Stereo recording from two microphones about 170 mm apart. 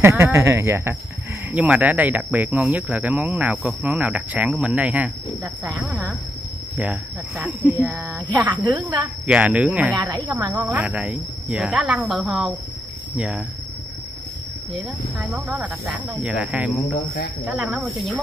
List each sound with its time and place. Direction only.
0.2 s speech: 15° right (ahead or behind)
8.3 s a woman's voice: 25° right (ahead or behind)
9.2 s speech: 5° right (ahead or behind)
9.9 s a woman's voice: 25° right (ahead or behind)
10.6 s speech: 10° right (ahead or behind)
15.1 s speech: 5° right (ahead or behind)